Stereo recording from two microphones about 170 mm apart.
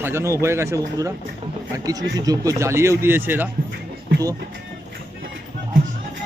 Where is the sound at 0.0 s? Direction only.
15° right (ahead or behind).